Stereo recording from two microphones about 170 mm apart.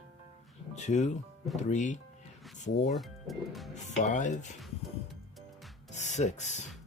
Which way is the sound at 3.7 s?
45° left (ahead or behind).